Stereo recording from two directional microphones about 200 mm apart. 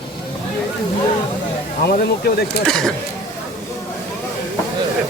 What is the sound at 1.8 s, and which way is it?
Speech, 50° left (ahead or behind).